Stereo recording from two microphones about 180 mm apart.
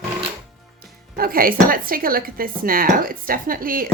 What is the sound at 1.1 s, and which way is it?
Speech, 55° right (ahead or behind).